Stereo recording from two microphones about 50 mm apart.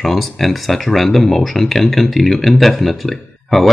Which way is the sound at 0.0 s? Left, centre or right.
Centre.